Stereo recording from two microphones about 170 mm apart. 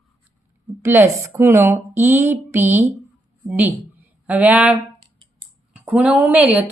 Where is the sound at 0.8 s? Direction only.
15° right (ahead or behind).